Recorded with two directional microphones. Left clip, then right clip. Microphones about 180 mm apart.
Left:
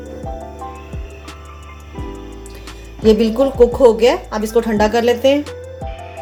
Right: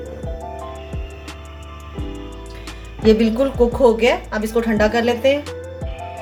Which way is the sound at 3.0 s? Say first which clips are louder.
Left 2 dB; 30° left (ahead or behind).